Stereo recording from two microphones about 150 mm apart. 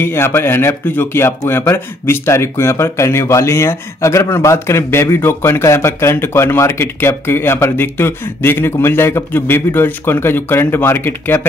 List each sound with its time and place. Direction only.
0.0 s speech: 15° left (ahead or behind)